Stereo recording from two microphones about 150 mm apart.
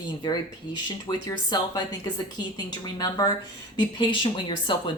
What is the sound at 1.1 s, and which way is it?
Speech, 25° left (ahead or behind).